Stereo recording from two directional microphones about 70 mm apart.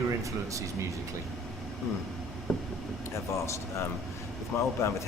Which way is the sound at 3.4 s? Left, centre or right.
Left.